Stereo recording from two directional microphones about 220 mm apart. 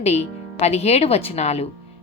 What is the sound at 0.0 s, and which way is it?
Speech, 30° left (ahead or behind).